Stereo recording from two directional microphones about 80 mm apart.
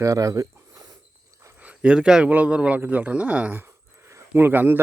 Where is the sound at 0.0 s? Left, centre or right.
Right.